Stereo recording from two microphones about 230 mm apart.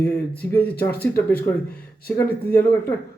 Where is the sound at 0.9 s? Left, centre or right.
Left.